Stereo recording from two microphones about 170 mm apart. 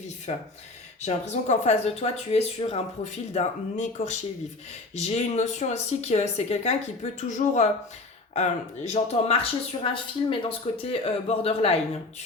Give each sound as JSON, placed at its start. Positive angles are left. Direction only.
{"t": 1.0, "sound": "speech", "side_deg": 40}